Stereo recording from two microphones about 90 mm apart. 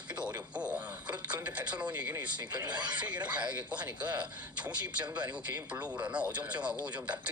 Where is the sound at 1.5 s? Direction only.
15° right (ahead or behind).